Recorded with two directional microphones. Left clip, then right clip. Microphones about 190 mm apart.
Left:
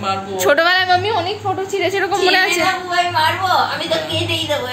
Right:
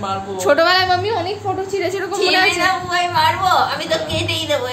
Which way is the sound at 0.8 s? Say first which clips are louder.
Left 2 dB; 5° right (ahead or behind).